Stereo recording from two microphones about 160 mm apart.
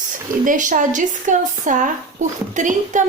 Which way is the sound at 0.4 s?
55° right (ahead or behind).